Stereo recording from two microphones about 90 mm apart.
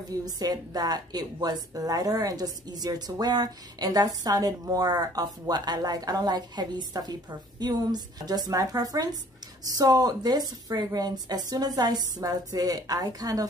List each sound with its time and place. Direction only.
0.2 s a woman's voice: 45° right (ahead or behind)